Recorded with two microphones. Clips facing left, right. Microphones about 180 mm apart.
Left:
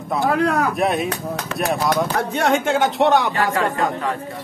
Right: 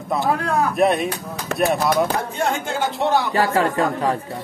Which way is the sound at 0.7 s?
Centre (ahead or behind).